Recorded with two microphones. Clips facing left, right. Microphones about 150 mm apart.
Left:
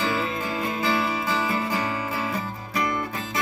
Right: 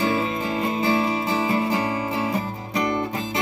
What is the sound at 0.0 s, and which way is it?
Music, 20° right (ahead or behind).